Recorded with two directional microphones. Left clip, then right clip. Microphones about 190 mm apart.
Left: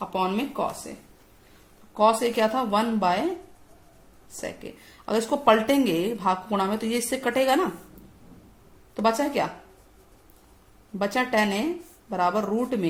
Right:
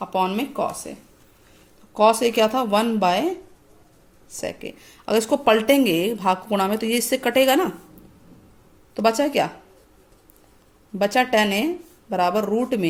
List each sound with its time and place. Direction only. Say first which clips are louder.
0.0 s speech: right 4 dB; 25° right (ahead or behind)
2.0 s speech: right 4 dB; 30° right (ahead or behind)
4.4 s speech: right 5 dB; 30° right (ahead or behind)
9.0 s speech: right 4 dB; 30° right (ahead or behind)
10.9 s speech: right 5 dB; 30° right (ahead or behind)